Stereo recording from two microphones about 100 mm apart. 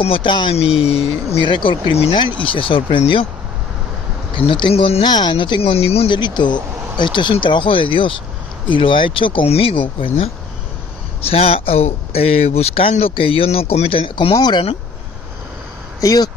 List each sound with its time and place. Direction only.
0.0 s speech: 60° left (ahead or behind)
0.6 s speech: 85° left
1.5 s speech: 55° left (ahead or behind)
4.4 s speech: 60° left (ahead or behind)
5.0 s speech: 45° left (ahead or behind)
5.6 s speech: 80° left
6.0 s speech: 50° left (ahead or behind)
11.1 s speech: 75° left (ahead or behind)
14.3 s speech: 45° left (ahead or behind)
16.0 s speech: 35° left (ahead or behind)